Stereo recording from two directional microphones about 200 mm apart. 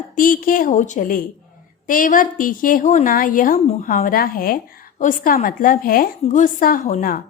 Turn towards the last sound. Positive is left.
turn(degrees=40)  # may be behind; listen again after turning